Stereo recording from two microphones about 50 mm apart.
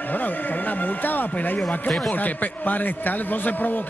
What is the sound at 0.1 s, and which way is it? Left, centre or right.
A man's voice, left.